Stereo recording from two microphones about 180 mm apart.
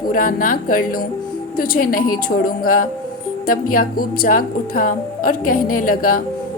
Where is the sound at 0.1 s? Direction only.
50° left (ahead or behind).